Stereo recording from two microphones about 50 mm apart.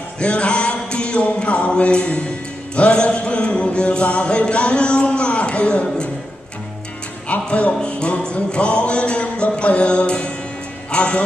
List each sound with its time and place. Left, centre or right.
0.2 s music: left
7.2 s music: left
10.9 s speech: left